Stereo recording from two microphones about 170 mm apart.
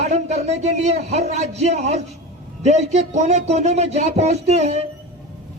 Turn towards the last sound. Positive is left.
turn(degrees=-40)  # may be behind; listen again after turning